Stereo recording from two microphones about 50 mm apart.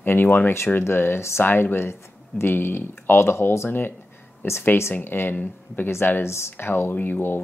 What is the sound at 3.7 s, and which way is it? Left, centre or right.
Speech, left.